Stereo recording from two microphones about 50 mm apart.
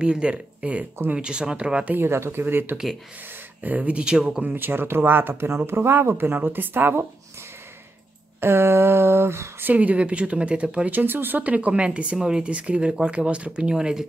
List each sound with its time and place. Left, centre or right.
0.0 s speech: centre
2.0 s a sound: right
2.4 s speech: right
3.6 s speech: right
4.4 s speech: right
8.4 s a sound: right
9.8 s speech: right
10.9 s speech: right
11.4 s speech: right